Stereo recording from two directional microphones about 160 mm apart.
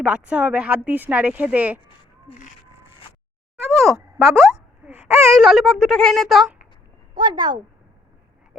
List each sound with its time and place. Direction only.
0.0 s speech: 5° right (ahead or behind)
3.7 s a sound: centre (ahead or behind)
4.2 s speech: centre (ahead or behind)
7.1 s speech: 25° right (ahead or behind)